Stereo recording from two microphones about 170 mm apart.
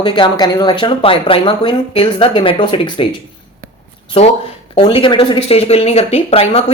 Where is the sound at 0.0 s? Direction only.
30° left (ahead or behind).